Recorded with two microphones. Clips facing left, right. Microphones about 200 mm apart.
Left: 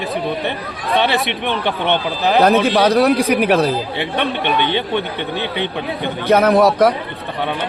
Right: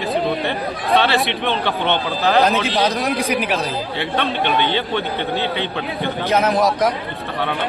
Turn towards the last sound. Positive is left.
turn(degrees=60)  # may be behind; listen again after turning